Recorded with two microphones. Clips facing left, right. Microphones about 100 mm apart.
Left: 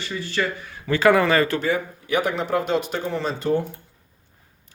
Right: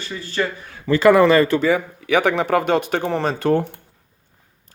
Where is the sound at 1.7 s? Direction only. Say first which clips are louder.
Right 4 dB; 75° right (ahead or behind); by 3.6 s 60° right (ahead or behind).